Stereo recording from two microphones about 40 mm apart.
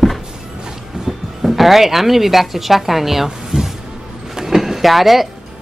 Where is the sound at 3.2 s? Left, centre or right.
Centre.